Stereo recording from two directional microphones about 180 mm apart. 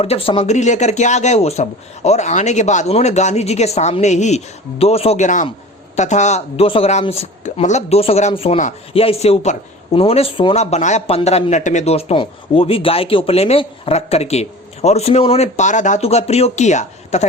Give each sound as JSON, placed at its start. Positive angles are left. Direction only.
{"t": 0.0, "sound": "speech", "side_deg": 30}